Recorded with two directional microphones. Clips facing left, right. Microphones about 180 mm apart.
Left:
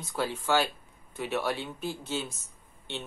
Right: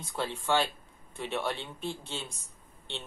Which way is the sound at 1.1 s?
5° left (ahead or behind).